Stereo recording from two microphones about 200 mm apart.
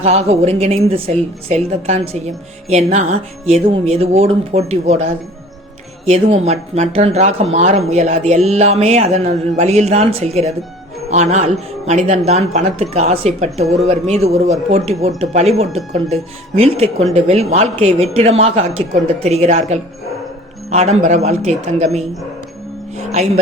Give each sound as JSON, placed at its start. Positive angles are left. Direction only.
{"t": 0.0, "sound": "a woman's voice", "side_deg": -30}
{"t": 20.7, "sound": "a woman's voice", "side_deg": -30}